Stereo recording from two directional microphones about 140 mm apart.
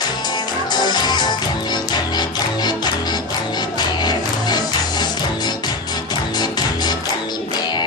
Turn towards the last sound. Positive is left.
turn(degrees=30)  # may be behind; listen again after turning